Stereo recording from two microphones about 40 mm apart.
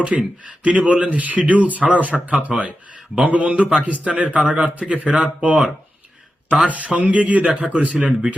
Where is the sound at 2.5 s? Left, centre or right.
Right.